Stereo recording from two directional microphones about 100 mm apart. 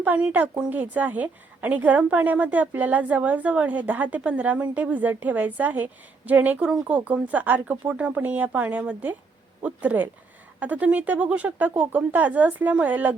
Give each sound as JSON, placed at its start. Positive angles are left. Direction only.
{"t": 0.0, "sound": "a woman's voice", "side_deg": -15}